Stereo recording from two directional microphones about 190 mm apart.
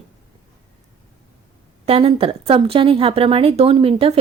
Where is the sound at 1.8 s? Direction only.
30° right (ahead or behind).